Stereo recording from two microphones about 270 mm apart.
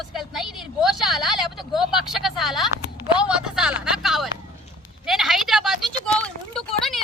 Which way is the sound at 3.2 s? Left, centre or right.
Centre.